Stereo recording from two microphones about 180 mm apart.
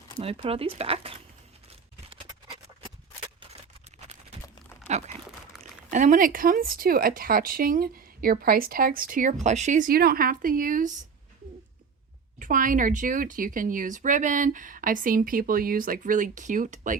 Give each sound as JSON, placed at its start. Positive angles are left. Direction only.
{"t": 0.2, "sound": "speech", "side_deg": -30}
{"t": 4.9, "sound": "crumpling", "side_deg": -40}
{"t": 5.9, "sound": "speech", "side_deg": -45}
{"t": 12.4, "sound": "speech", "side_deg": -50}